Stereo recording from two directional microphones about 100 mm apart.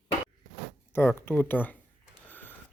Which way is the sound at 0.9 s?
25° left (ahead or behind).